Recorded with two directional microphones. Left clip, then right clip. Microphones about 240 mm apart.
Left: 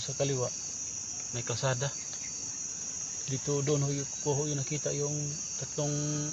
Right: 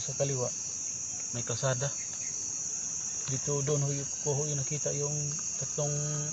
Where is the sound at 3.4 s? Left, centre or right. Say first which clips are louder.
Left 2 dB; left.